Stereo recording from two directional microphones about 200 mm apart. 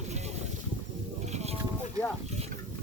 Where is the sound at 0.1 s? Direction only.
35° right (ahead or behind).